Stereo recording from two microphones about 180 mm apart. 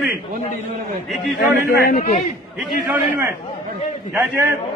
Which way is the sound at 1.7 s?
45° left (ahead or behind).